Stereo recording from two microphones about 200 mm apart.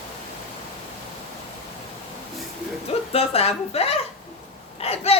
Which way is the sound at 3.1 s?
30° left (ahead or behind).